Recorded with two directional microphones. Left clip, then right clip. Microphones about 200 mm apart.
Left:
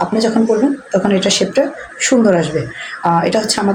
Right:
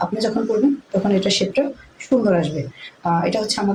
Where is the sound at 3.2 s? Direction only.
20° left (ahead or behind).